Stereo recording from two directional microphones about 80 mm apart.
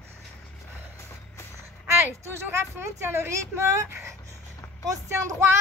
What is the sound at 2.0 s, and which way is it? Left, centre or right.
A woman's voice, right.